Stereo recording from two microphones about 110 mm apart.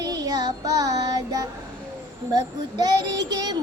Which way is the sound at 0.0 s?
35° right (ahead or behind).